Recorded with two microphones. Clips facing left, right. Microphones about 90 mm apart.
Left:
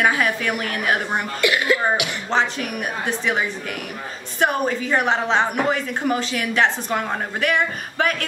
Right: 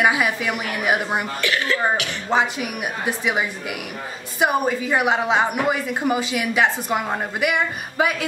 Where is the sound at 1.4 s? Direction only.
10° left (ahead or behind).